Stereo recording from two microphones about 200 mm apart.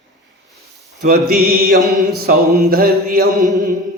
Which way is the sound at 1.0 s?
50° right (ahead or behind).